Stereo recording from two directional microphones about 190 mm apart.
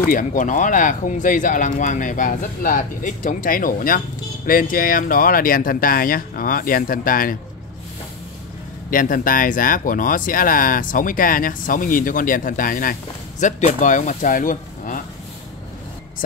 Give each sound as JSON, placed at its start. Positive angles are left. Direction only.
{"t": 0.1, "sound": "speech", "side_deg": 45}
{"t": 8.9, "sound": "speech", "side_deg": 45}